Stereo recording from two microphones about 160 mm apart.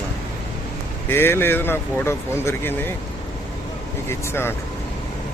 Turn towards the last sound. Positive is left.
turn(degrees=15)  # may be behind; listen again after turning